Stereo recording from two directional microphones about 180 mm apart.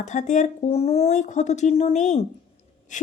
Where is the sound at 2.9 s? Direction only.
45° left (ahead or behind).